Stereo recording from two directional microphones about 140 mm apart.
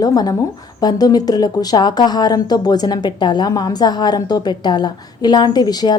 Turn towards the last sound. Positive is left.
turn(degrees=30)  # may be behind; listen again after turning